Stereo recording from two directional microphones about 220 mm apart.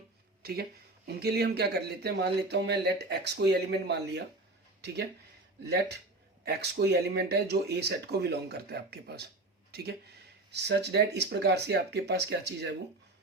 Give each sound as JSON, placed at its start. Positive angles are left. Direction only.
{"t": 0.4, "sound": "speech", "side_deg": -45}
{"t": 5.6, "sound": "speech", "side_deg": -50}